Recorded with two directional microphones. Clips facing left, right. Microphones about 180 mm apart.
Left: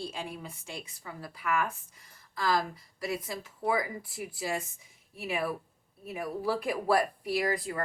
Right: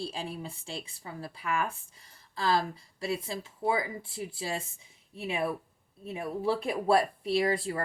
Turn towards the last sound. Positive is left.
turn(degrees=-30)  # may be behind; listen again after turning